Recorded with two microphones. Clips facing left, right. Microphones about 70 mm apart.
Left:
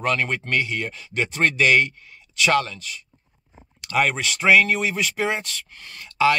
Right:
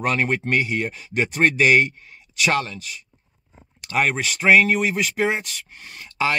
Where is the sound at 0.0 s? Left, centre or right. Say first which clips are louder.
Right 2 dB; centre.